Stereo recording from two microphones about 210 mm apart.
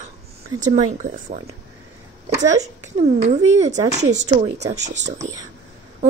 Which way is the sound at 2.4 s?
35° right (ahead or behind).